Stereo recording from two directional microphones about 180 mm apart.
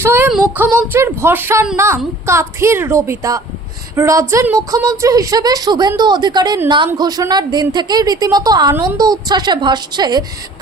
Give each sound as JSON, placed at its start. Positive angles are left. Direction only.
{"t": 0.0, "sound": "a woman's voice", "side_deg": -15}